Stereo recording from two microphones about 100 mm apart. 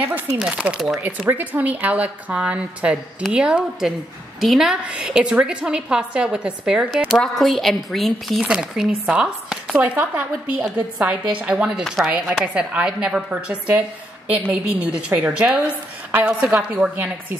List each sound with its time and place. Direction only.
0.4 s a woman's voice: 10° right (ahead or behind)
1.0 s a woman's voice: 20° right (ahead or behind)
9.8 s a woman's voice: 15° right (ahead or behind)
16.4 s speech: 5° right (ahead or behind)
16.7 s a woman's voice: 15° right (ahead or behind)